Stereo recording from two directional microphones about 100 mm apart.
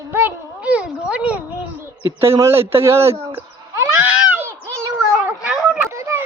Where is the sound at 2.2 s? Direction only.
25° right (ahead or behind).